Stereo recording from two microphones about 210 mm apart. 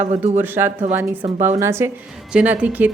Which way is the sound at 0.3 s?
10° right (ahead or behind).